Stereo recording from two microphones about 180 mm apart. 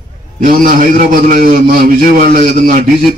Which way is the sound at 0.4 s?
50° right (ahead or behind).